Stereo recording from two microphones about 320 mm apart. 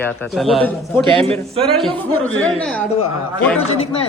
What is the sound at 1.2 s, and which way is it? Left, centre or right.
Speech, centre.